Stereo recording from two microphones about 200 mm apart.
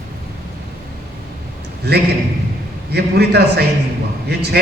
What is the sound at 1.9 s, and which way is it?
A man's voice, 55° right (ahead or behind).